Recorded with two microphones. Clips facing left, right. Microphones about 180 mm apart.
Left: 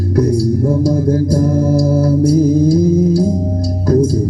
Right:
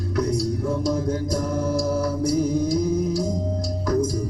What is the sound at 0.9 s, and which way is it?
Music, 30° left (ahead or behind).